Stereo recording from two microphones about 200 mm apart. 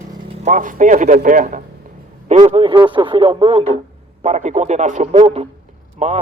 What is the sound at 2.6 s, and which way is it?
A man's voice, 25° right (ahead or behind).